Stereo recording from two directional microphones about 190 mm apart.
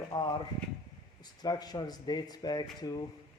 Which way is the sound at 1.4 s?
20° left (ahead or behind).